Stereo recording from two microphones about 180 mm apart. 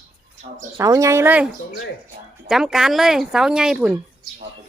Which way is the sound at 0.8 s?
15° right (ahead or behind).